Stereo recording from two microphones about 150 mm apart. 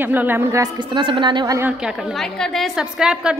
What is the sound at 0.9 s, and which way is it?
Speech, 35° right (ahead or behind).